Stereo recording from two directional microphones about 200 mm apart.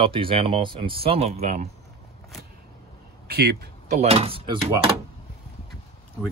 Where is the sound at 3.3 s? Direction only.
50° right (ahead or behind).